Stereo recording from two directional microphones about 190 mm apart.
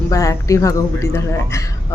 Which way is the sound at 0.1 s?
15° left (ahead or behind).